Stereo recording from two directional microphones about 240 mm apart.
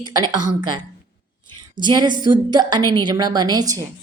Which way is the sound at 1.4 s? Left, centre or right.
Centre.